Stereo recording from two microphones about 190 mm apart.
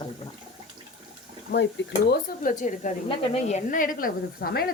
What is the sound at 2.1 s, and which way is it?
A woman's voice, 45° left (ahead or behind).